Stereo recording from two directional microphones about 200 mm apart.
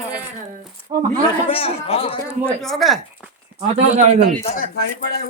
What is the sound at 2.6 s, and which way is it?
Speech, centre (ahead or behind).